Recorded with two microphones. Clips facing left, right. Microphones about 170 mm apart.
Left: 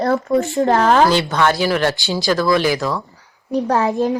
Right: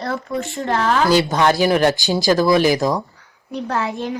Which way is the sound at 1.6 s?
20° right (ahead or behind).